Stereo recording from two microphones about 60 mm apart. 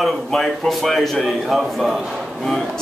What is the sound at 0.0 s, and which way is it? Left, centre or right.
A man's voice, centre.